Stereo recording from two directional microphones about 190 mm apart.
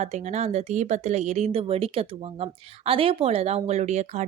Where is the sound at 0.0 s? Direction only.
35° right (ahead or behind).